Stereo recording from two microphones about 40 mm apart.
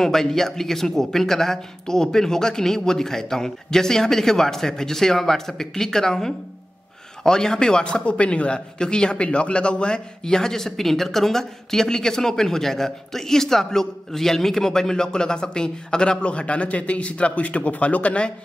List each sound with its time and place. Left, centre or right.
0.0 s speech: centre; by 18.3 s left